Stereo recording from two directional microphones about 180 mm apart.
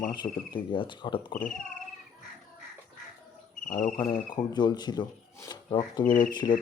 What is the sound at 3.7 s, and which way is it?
Speech, 40° left (ahead or behind).